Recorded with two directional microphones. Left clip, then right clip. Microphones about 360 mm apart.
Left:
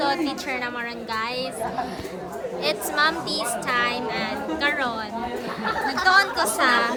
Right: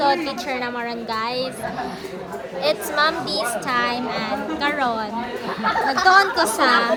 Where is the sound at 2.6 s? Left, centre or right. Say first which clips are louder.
Right 3 dB; centre.